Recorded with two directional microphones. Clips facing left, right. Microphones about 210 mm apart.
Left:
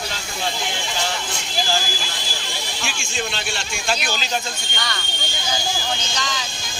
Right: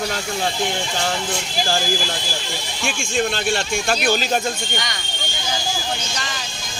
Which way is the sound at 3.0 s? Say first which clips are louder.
Right 9 dB; 50° right (ahead or behind).